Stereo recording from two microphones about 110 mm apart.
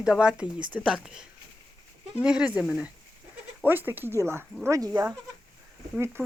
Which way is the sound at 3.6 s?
20° right (ahead or behind).